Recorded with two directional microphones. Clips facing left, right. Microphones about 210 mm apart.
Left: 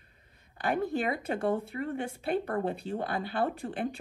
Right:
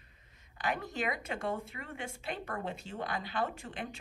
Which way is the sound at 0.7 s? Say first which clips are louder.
Left 7 dB; 30° left (ahead or behind).